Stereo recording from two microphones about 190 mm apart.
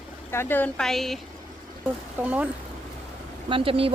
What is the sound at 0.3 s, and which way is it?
Speech, 10° left (ahead or behind).